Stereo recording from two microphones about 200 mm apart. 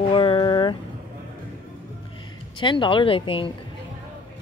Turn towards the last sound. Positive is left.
turn(degrees=25)  # may be behind; listen again after turning